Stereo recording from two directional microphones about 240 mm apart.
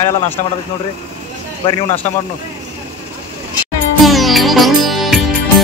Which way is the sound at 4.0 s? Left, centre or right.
Centre.